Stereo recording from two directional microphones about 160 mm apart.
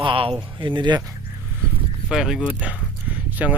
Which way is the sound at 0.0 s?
35° right (ahead or behind).